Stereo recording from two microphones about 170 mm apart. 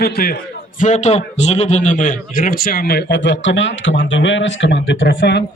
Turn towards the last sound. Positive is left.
turn(degrees=80)